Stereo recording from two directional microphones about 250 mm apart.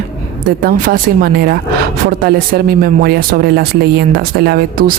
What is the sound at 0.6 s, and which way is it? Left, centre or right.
Speech, right.